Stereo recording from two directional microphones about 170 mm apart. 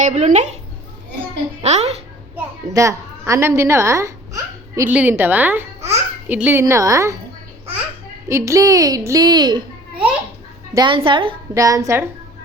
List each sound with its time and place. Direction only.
0.0 s speech: 45° right (ahead or behind)
1.6 s a child's voice: 40° right (ahead or behind)
2.3 s a child's voice: 20° right (ahead or behind)
8.3 s a woman's voice: 20° right (ahead or behind)
10.8 s a woman's voice: 30° right (ahead or behind)
11.5 s a woman's voice: 20° right (ahead or behind)